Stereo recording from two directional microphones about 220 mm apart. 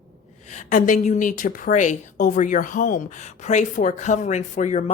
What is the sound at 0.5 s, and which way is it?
A woman's voice, 35° left (ahead or behind).